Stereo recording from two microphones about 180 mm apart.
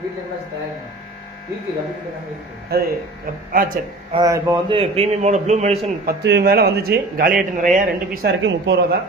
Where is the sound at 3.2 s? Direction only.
50° right (ahead or behind).